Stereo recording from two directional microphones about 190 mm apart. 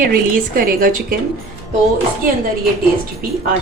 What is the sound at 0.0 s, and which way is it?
Speech, 50° right (ahead or behind).